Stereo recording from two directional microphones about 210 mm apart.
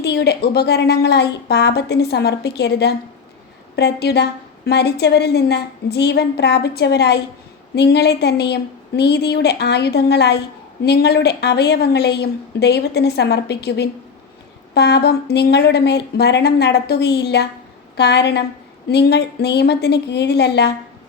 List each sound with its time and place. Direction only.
0.0 s a woman's voice: 50° left (ahead or behind)